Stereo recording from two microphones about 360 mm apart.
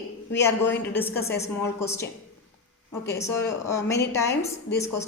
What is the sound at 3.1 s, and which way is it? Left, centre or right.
A woman's voice, centre.